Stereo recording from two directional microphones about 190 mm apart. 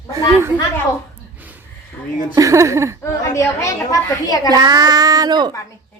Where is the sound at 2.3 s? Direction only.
15° right (ahead or behind).